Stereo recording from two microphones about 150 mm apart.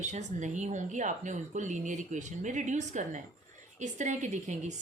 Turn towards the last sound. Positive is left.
turn(degrees=-50)  # may be behind; listen again after turning